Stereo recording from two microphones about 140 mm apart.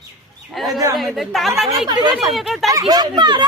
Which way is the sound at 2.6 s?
25° right (ahead or behind).